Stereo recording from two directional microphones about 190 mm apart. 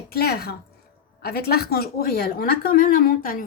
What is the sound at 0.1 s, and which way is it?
A woman's voice, 55° left (ahead or behind).